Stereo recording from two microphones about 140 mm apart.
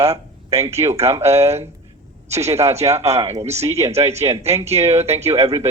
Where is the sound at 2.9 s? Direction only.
50° right (ahead or behind).